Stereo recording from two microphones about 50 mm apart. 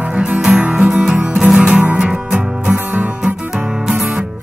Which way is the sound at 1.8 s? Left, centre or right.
Right.